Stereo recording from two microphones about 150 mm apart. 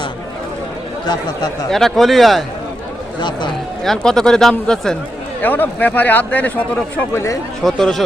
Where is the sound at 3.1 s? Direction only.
30° left (ahead or behind).